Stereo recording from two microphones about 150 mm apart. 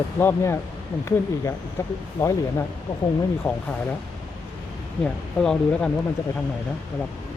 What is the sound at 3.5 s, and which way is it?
Speech, 20° left (ahead or behind).